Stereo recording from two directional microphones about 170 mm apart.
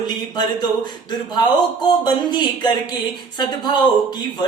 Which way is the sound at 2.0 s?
25° left (ahead or behind).